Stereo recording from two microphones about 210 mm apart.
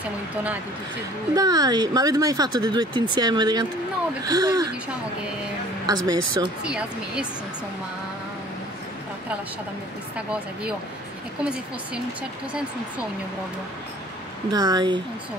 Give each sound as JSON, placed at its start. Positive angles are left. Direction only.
{"t": 1.3, "sound": "a woman's voice", "side_deg": -15}
{"t": 5.9, "sound": "a woman's voice", "side_deg": -20}
{"t": 6.6, "sound": "speech", "side_deg": -5}
{"t": 14.5, "sound": "speech", "side_deg": -20}